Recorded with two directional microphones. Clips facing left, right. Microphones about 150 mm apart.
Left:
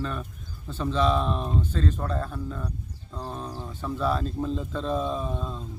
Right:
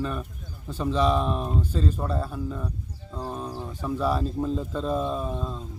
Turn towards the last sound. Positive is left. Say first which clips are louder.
# right 1 dB
turn(degrees=0)  # may be behind; listen again after turning